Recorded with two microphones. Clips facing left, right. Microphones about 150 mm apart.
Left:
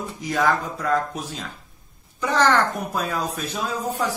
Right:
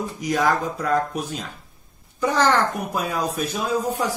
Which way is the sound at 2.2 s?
10° right (ahead or behind).